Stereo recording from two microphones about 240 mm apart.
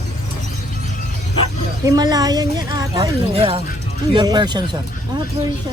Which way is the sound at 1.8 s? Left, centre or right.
Centre.